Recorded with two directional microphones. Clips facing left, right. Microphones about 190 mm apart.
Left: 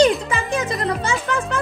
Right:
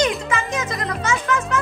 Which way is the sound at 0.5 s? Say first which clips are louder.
Left 4 dB; 30° left (ahead or behind).